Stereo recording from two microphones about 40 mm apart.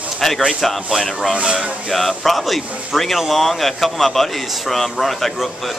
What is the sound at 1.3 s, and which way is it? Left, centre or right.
Speech, right.